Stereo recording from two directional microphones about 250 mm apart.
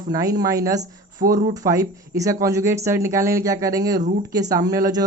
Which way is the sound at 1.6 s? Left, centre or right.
Centre.